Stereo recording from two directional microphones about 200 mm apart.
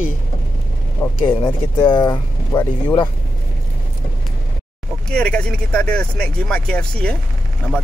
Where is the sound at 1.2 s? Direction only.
25° left (ahead or behind).